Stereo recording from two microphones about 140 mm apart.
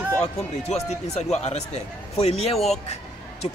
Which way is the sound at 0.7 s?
50° left (ahead or behind).